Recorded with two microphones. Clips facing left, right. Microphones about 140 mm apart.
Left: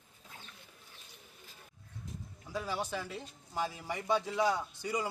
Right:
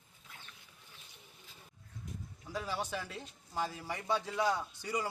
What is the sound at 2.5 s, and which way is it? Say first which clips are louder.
Speech: left 1 dB; 15° left (ahead or behind).